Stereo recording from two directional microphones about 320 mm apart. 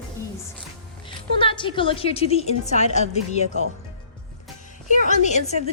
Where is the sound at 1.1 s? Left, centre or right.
Centre.